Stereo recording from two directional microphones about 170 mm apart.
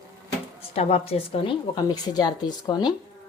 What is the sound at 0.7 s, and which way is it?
Speech, 35° left (ahead or behind).